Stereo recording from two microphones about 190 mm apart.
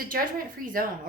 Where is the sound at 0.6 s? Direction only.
45° right (ahead or behind).